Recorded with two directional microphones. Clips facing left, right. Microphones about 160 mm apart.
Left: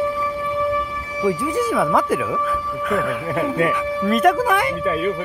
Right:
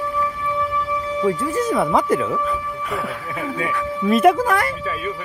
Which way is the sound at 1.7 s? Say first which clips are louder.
Right 2 dB; centre (ahead or behind).